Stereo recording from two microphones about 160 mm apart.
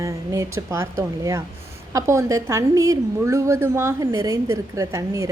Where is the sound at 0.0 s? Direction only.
20° right (ahead or behind).